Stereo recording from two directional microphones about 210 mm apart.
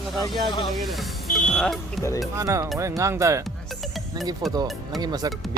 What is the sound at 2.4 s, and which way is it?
Speech, 15° right (ahead or behind).